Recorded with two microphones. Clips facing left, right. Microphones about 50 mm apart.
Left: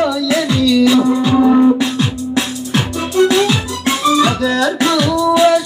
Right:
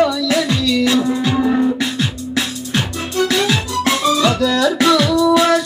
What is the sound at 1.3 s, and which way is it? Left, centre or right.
Beatboxing, centre.